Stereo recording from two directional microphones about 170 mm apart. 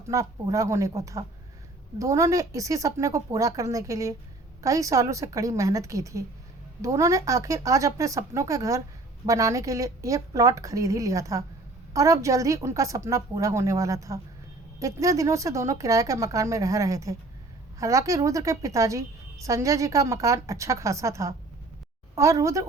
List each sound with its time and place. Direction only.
0.1 s a woman's voice: 20° right (ahead or behind)